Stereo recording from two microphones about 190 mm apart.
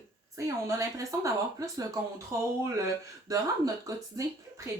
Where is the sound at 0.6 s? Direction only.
15° right (ahead or behind).